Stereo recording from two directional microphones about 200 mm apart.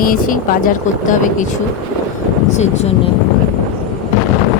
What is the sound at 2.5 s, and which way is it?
Speech, 35° left (ahead or behind).